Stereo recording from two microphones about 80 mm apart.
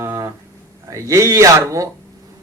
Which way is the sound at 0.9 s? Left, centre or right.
Right.